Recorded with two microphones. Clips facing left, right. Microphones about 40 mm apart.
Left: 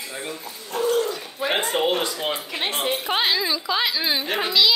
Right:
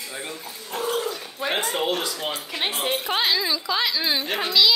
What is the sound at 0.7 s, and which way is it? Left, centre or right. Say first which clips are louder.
Dog: left 4 dB; centre.